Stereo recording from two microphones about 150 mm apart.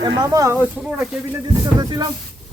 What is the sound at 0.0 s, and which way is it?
Speech, 20° right (ahead or behind).